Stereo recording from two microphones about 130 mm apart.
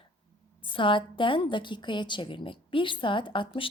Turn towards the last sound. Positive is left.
turn(degrees=40)  # may be behind; listen again after turning